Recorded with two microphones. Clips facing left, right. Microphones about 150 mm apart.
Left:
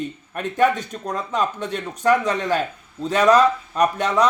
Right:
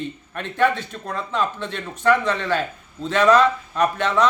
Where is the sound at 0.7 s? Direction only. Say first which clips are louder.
Left 2 dB; 40° left (ahead or behind).